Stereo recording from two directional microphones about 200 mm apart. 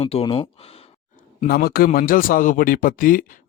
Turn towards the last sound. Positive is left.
turn(degrees=45)  # may be behind; listen again after turning